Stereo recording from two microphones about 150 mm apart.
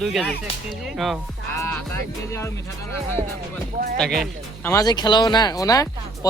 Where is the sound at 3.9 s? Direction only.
Centre (ahead or behind).